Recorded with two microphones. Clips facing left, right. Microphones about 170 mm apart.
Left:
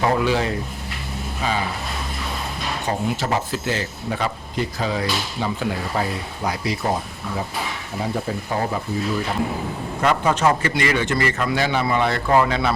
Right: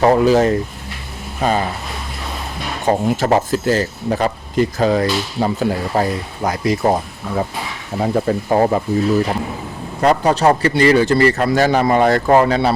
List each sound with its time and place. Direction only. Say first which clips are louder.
0.0 s a man's voice: right 8 dB; 40° right (ahead or behind)
2.8 s speech: right 8 dB; 50° right (ahead or behind)
8.0 s speech: right 8 dB; 55° right (ahead or behind)
10.0 s a man's voice: right 5 dB; 35° right (ahead or behind)